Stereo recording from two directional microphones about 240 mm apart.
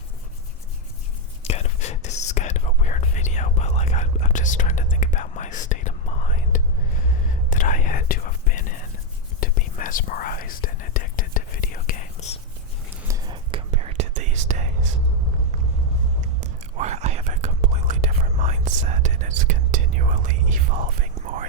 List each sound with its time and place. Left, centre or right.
1.5 s whispering: left
12.9 s whispering: centre; by 14.7 s right
16.4 s whispering: right